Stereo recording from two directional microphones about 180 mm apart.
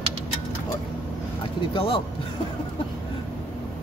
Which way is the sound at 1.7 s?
30° left (ahead or behind).